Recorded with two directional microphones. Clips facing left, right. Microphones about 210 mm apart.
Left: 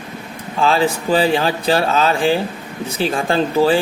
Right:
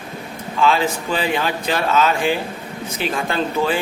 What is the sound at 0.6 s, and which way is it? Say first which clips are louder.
Speech: left 2 dB; 35° left (ahead or behind).